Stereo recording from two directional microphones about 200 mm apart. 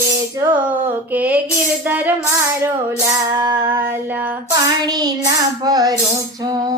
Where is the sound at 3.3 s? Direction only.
15° right (ahead or behind).